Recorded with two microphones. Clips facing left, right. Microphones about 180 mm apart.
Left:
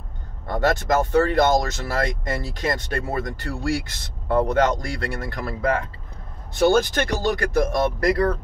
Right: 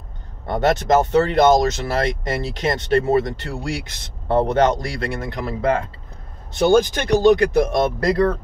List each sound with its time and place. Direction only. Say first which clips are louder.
0.5 s speech: right 4 dB; 20° right (ahead or behind)